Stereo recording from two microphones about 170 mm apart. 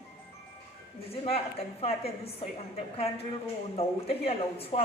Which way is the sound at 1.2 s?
35° left (ahead or behind).